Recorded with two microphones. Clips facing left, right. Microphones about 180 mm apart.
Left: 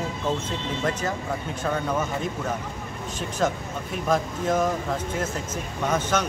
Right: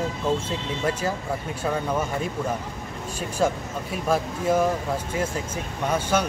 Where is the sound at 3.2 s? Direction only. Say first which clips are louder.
Right 2 dB; 10° right (ahead or behind).